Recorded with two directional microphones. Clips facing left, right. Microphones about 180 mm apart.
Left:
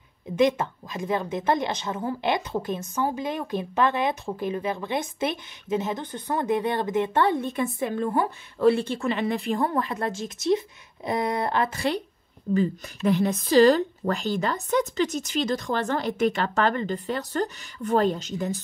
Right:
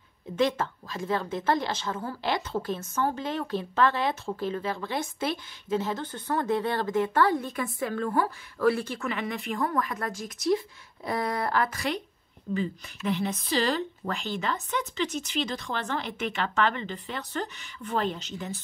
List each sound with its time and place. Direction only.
0.4 s a woman's voice: 15° left (ahead or behind)
12.5 s speech: 45° left (ahead or behind)